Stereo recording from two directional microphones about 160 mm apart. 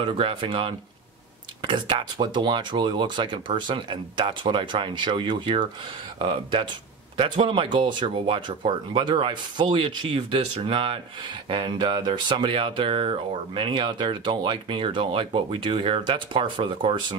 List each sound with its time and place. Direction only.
0.0 s speech: 30° right (ahead or behind)